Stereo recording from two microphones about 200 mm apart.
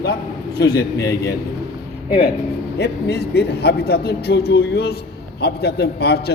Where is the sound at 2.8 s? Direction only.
55° left (ahead or behind).